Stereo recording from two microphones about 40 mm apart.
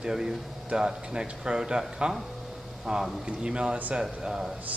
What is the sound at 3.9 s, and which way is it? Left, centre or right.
Speech, centre.